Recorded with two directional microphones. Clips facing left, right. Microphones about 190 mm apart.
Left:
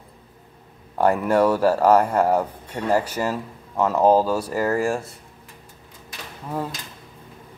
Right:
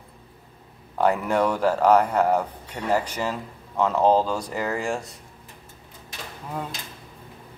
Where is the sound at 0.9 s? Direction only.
10° left (ahead or behind).